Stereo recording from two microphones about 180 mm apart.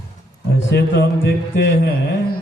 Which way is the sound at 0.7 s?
80° left.